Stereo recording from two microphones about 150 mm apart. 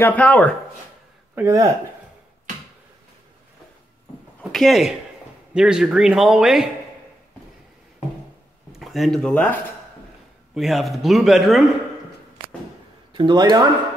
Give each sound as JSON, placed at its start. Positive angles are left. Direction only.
{"t": 0.0, "sound": "speech", "side_deg": 10}
{"t": 1.3, "sound": "speech", "side_deg": -20}
{"t": 4.5, "sound": "a man's voice", "side_deg": 0}
{"t": 8.7, "sound": "speech", "side_deg": 0}
{"t": 10.5, "sound": "a man's voice", "side_deg": 0}
{"t": 13.1, "sound": "speech", "side_deg": -30}